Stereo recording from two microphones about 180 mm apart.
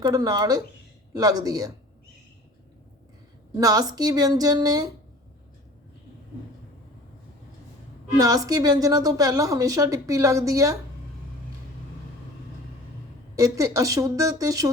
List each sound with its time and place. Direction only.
0.0 s a woman's voice: 20° right (ahead or behind)
3.5 s a woman's voice: 20° right (ahead or behind)
8.2 s a woman's voice: 20° right (ahead or behind)
13.3 s speech: 15° right (ahead or behind)